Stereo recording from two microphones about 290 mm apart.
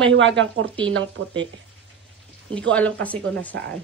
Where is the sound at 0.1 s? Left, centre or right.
Right.